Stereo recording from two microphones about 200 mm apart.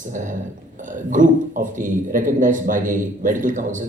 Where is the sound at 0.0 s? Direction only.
40° right (ahead or behind).